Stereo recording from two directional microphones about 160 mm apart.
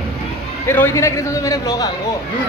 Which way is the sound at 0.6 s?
15° left (ahead or behind).